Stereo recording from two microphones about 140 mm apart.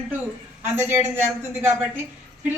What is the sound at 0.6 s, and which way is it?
Speech, 15° right (ahead or behind).